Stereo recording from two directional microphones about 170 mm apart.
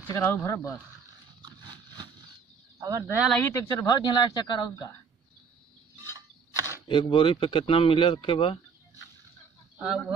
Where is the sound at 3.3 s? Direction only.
15° left (ahead or behind).